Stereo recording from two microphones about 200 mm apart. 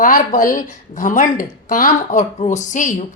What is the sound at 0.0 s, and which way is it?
Speech, 40° left (ahead or behind).